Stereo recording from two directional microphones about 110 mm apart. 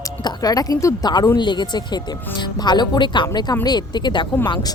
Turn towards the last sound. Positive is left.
turn(degrees=45)  # may be behind; listen again after turning